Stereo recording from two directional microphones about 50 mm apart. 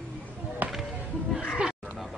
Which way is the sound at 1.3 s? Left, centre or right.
Centre.